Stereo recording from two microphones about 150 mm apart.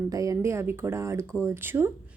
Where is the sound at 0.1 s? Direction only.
20° right (ahead or behind).